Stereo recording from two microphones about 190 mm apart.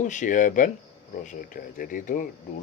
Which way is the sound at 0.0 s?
40° left (ahead or behind).